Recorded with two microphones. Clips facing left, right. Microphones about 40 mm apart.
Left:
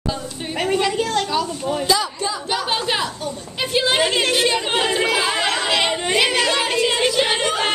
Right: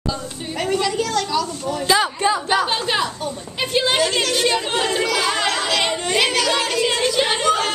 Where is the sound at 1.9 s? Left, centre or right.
Right.